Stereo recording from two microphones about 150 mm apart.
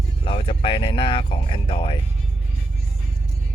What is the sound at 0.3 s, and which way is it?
Speech, 35° left (ahead or behind).